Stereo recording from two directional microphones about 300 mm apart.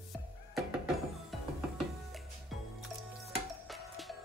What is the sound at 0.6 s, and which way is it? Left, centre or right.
Music, centre.